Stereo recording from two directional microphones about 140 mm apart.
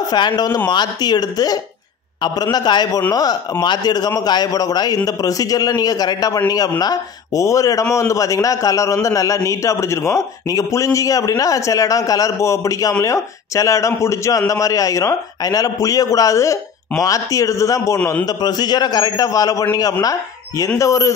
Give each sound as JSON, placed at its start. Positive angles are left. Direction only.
{"t": 0.1, "sound": "a man's voice", "side_deg": 30}